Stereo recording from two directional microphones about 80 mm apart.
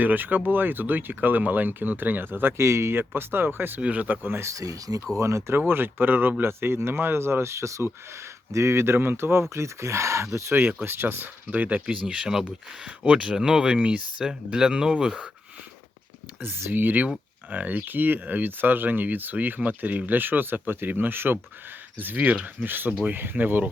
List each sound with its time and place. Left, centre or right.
0.0 s speech: right
4.5 s speech: right
5.5 s speech: right
10.5 s speech: right
16.4 s speech: right